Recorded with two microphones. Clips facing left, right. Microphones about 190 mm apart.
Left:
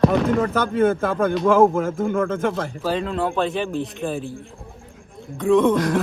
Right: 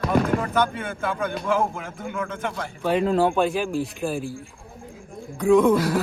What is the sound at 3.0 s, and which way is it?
Speech, 35° right (ahead or behind).